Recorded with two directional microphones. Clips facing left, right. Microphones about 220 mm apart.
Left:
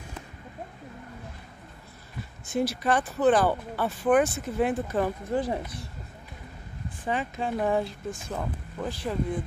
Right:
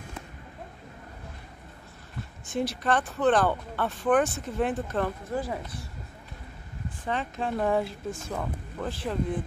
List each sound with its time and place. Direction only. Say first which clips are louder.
2.5 s speech: left 1 dB; 5° left (ahead or behind)
5.3 s speech: left 3 dB; 20° left (ahead or behind)
7.1 s speech: left 1 dB; 5° left (ahead or behind)